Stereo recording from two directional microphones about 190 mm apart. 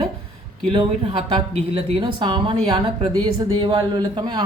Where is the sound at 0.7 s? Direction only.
30° right (ahead or behind).